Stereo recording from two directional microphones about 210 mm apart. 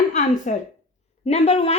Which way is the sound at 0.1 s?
35° left (ahead or behind).